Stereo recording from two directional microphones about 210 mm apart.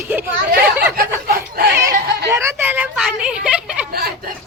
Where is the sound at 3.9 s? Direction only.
45° right (ahead or behind).